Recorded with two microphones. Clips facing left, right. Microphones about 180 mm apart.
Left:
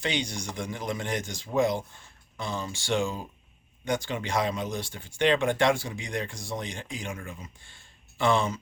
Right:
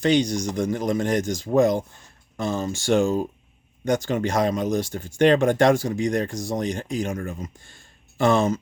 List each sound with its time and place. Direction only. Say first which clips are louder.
0.0 s speech: right 11 dB; 40° right (ahead or behind)